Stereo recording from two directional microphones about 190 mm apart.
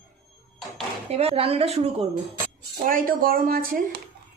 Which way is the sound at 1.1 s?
30° right (ahead or behind).